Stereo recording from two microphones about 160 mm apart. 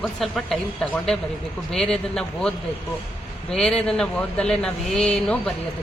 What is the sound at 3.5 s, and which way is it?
Speech, 5° left (ahead or behind).